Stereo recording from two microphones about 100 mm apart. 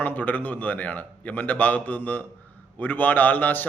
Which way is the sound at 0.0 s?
15° left (ahead or behind).